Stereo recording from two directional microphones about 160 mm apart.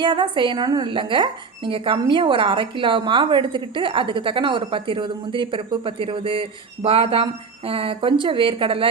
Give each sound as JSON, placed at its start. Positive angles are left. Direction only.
{"t": 0.0, "sound": "a woman's voice", "side_deg": -30}